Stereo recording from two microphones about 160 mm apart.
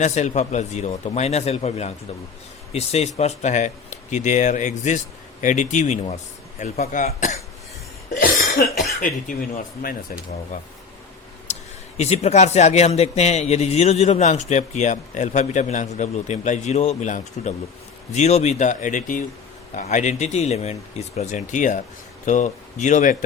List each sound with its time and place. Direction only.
0.0 s a man's voice: 45° left (ahead or behind)
8.1 s cough: 65° left (ahead or behind)
11.5 s tick-tock: 45° left (ahead or behind)
11.9 s a man's voice: 45° left (ahead or behind)